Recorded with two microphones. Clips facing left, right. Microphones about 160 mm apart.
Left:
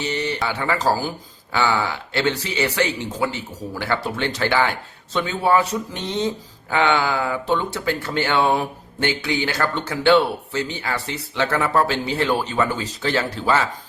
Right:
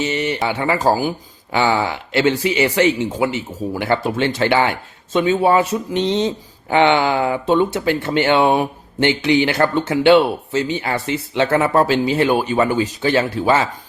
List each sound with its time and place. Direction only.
0.0 s speech: 20° right (ahead or behind)